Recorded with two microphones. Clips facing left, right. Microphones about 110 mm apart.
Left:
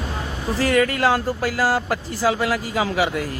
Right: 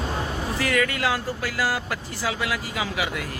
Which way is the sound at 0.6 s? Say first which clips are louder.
Left 6 dB; 35° left (ahead or behind).